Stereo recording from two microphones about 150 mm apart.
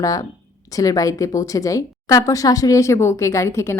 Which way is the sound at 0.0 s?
25° left (ahead or behind).